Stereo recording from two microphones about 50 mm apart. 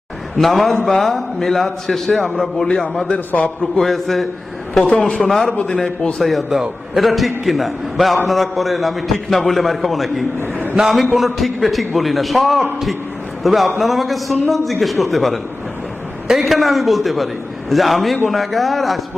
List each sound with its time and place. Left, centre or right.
0.3 s a man's voice: centre
4.8 s a man's voice: left
5.2 s a man's voice: centre
5.5 s a man's voice: left
6.1 s a man's voice: centre